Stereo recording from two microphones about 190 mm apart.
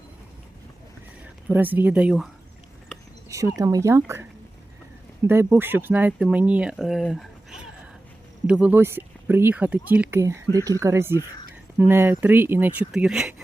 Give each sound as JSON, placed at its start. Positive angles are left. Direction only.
{"t": 1.5, "sound": "speech", "side_deg": -10}
{"t": 3.2, "sound": "a sound", "side_deg": -15}
{"t": 3.6, "sound": "speech", "side_deg": -15}